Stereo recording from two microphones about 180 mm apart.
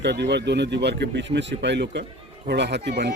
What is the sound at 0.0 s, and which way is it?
Speech, 70° right (ahead or behind).